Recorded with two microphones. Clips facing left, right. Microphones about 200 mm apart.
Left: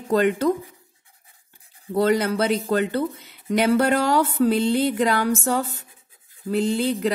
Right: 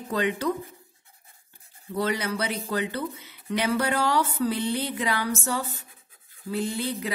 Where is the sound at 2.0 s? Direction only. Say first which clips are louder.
Left 8 dB; 55° left (ahead or behind); by 4.5 s 40° left (ahead or behind).